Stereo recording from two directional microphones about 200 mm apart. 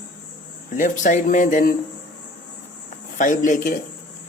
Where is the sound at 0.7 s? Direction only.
40° left (ahead or behind).